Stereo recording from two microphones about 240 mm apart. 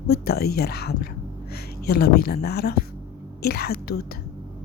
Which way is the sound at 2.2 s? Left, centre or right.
Left.